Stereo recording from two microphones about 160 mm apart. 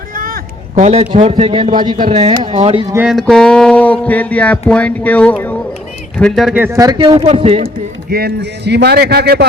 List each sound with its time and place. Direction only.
0.8 s a man's voice: 45° right (ahead or behind)
1.3 s speech: 35° right (ahead or behind)
1.8 s speech: 30° right (ahead or behind)
2.9 s music: 10° right (ahead or behind)
3.2 s speech: 5° left (ahead or behind)
6.5 s a man's voice: 15° right (ahead or behind); by 7.6 s 35° right (ahead or behind)
8.1 s a man's voice: 85° right